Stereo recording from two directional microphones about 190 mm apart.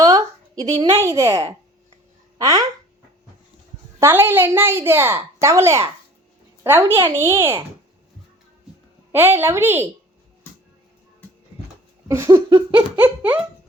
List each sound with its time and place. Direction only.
0.0 s a woman's voice: 20° right (ahead or behind)
4.0 s a child's voice: 10° right (ahead or behind)
9.1 s a child's voice: 10° right (ahead or behind)
12.0 s a child's voice: 15° right (ahead or behind)
12.5 s laughter: 30° right (ahead or behind)
13.0 s a child's voice: 10° right (ahead or behind)